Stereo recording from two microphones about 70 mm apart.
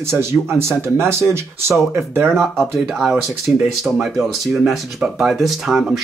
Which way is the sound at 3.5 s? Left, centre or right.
Right.